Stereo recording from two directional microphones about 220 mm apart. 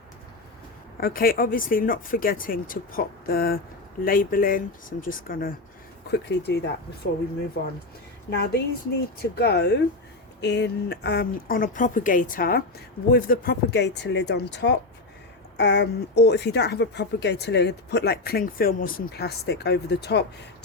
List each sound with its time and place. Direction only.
0.9 s speech: 40° left (ahead or behind)
6.1 s a woman's voice: 50° left (ahead or behind)